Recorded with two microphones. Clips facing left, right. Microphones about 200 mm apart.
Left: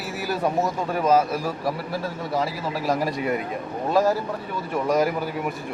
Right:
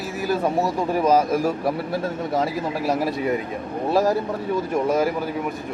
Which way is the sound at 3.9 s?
10° right (ahead or behind).